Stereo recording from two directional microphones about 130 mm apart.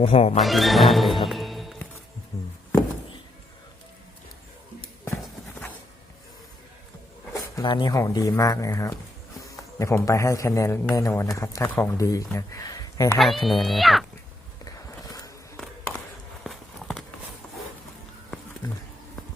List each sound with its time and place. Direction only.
0.0 s speech: 50° left (ahead or behind)
0.3 s speech: centre (ahead or behind)
2.3 s music: 25° left (ahead or behind)
5.0 s clip-clop: 20° left (ahead or behind)
7.5 s speech: 35° left (ahead or behind)
7.9 s a man's voice: 25° left (ahead or behind)
13.1 s speech: centre (ahead or behind)
14.6 s a sound: 25° left (ahead or behind)
15.5 s a sound: 5° left (ahead or behind)
16.4 s walk: centre (ahead or behind)